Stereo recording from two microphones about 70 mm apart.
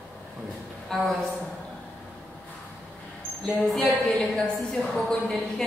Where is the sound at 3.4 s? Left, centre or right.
Centre.